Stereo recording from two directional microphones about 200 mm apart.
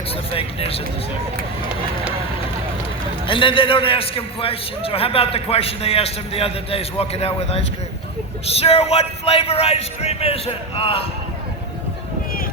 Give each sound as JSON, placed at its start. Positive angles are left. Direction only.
{"t": 0.3, "sound": "a man's voice", "side_deg": 30}
{"t": 3.2, "sound": "a man's voice", "side_deg": 25}